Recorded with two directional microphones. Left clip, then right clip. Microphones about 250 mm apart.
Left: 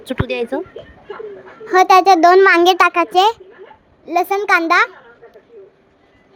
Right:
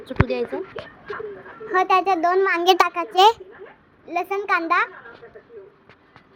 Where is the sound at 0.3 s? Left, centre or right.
Left.